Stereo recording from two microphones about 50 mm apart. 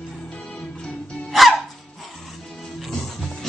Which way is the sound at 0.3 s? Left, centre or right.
Centre.